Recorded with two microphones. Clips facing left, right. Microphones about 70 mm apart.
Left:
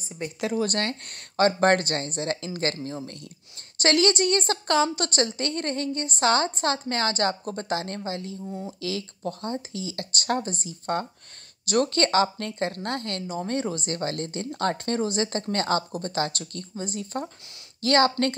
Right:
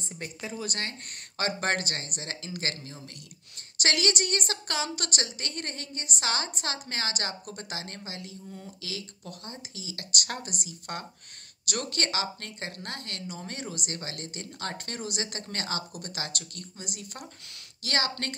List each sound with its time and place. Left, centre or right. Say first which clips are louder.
0.6 s speech: left 8 dB; left